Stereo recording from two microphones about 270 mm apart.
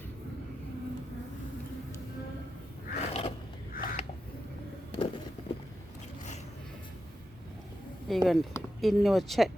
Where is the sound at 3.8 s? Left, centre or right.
Left.